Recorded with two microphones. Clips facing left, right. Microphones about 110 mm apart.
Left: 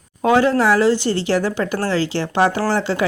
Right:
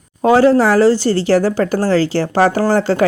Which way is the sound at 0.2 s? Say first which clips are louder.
Right 5 dB; 35° right (ahead or behind).